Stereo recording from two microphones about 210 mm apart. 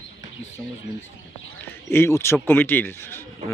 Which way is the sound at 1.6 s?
10° left (ahead or behind).